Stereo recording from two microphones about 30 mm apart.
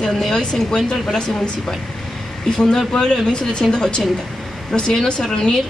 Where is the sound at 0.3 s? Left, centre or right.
Left.